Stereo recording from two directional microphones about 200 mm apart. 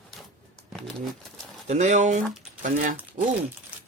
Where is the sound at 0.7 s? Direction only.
Centre (ahead or behind).